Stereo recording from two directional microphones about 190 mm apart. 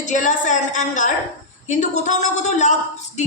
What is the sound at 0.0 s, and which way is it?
A woman's voice, 40° left (ahead or behind).